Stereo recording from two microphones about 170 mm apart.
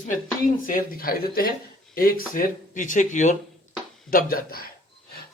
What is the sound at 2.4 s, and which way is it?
Speech, 50° left (ahead or behind).